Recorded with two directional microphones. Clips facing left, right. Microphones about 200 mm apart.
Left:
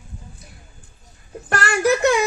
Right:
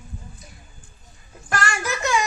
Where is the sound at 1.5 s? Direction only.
60° left (ahead or behind).